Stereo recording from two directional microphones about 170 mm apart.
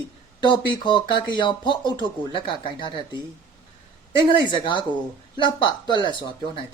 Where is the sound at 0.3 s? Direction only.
25° left (ahead or behind).